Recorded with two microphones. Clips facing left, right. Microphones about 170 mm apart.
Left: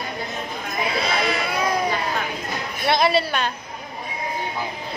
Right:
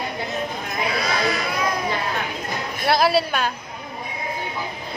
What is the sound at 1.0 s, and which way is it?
Speech, 25° left (ahead or behind).